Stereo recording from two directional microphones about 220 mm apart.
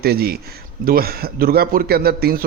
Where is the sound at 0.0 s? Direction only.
45° right (ahead or behind).